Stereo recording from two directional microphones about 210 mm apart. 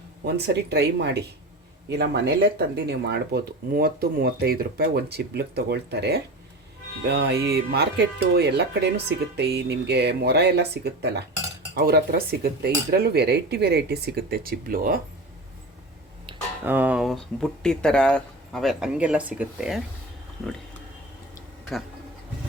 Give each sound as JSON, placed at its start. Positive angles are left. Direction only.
{"t": 0.3, "sound": "speech", "side_deg": -50}
{"t": 16.6, "sound": "speech", "side_deg": -10}